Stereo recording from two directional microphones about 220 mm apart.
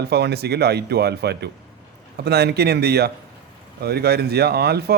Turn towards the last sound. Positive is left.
turn(degrees=-45)  # may be behind; listen again after turning